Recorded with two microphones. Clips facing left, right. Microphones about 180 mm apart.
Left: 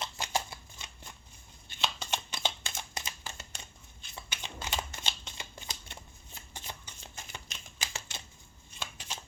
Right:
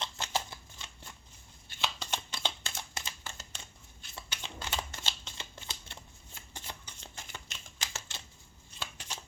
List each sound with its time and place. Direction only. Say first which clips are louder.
0.0 s shuffling cards: left 1 dB; 15° left (ahead or behind)